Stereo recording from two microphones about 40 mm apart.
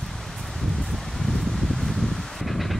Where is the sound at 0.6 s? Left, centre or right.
Centre.